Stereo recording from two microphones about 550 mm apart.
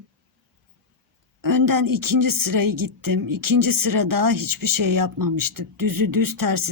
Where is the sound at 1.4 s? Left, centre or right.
Right.